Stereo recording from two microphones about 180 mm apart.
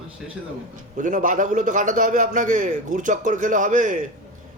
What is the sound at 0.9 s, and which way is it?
A man's voice, 45° right (ahead or behind).